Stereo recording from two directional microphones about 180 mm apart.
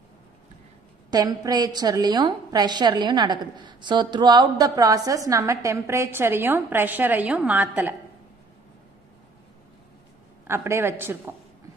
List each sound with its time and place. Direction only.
1.1 s a woman's voice: 20° right (ahead or behind)
10.4 s a woman's voice: 15° right (ahead or behind)